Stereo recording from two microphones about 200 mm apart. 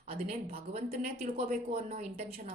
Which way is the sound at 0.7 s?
45° right (ahead or behind).